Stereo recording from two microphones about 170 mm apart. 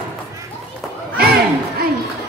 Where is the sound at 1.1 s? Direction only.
65° right (ahead or behind).